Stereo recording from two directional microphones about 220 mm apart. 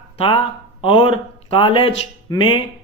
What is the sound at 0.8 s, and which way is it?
Speech, 25° left (ahead or behind).